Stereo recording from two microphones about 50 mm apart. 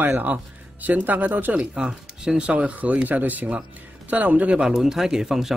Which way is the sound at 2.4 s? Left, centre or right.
Right.